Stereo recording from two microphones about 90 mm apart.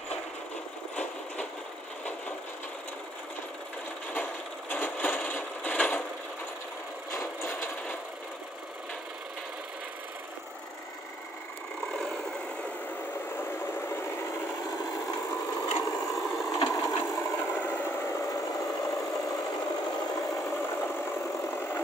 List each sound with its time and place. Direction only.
4.1 s a sound: 20° left (ahead or behind)
11.9 s vehicle: 5° left (ahead or behind)
13.4 s vehicle: 25° left (ahead or behind)
15.0 s a sound: 25° left (ahead or behind)
16.2 s wood: centre (ahead or behind)
16.6 s wood: 35° left (ahead or behind)
19.1 s engine: 40° left (ahead or behind)
20.6 s vehicle: 20° left (ahead or behind)